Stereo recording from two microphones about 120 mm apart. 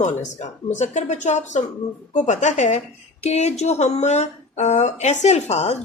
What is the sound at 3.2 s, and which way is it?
Speech, 65° left (ahead or behind).